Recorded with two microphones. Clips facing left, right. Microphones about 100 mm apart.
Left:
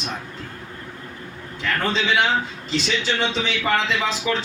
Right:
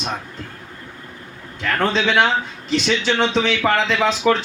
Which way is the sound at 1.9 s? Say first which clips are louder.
Right 2 dB; 70° right (ahead or behind).